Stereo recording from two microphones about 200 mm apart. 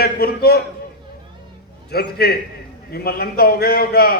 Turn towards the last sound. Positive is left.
turn(degrees=50)  # may be behind; listen again after turning